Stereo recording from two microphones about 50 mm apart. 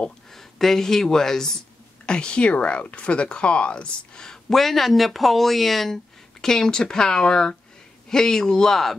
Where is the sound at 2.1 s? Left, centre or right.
Centre.